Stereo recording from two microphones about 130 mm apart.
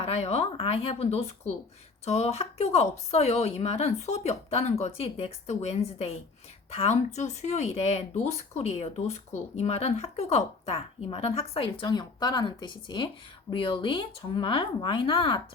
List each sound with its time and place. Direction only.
0.0 s speech: 55° left (ahead or behind)